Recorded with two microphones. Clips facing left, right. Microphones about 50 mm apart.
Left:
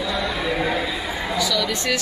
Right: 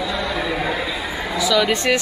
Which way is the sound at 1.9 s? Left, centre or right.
Right.